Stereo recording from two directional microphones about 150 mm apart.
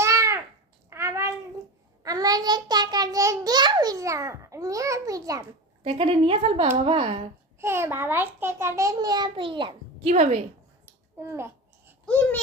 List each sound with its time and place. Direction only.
0.0 s babbling: 20° right (ahead or behind)
0.9 s a sound: 20° right (ahead or behind)
2.0 s a child's voice: 25° right (ahead or behind)
5.8 s speech: 45° right (ahead or behind)
7.6 s a child's voice: 15° right (ahead or behind); by 10.1 s 35° right (ahead or behind)
10.1 s a woman's voice: 50° right (ahead or behind)
10.8 s babbling: 15° right (ahead or behind)
12.0 s speech: 10° left (ahead or behind)